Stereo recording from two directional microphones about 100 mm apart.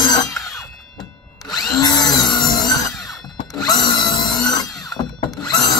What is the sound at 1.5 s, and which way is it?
Tools, 40° left (ahead or behind).